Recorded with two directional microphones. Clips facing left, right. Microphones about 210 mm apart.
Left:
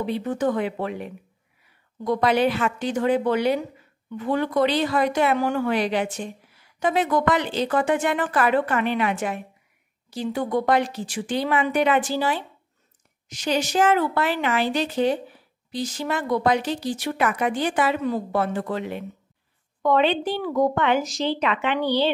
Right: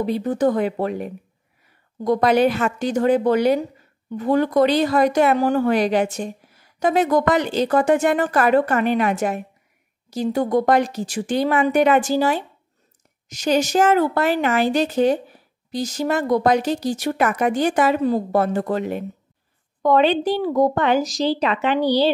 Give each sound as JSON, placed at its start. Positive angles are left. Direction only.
{"t": 0.0, "sound": "a woman's voice", "side_deg": -40}